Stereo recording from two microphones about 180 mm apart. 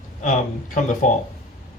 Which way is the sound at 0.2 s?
45° left (ahead or behind).